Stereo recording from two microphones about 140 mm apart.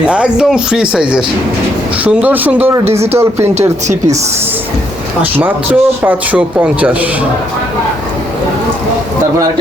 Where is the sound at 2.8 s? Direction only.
50° right (ahead or behind).